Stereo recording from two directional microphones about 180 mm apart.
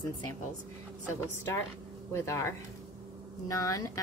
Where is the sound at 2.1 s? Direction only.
15° left (ahead or behind).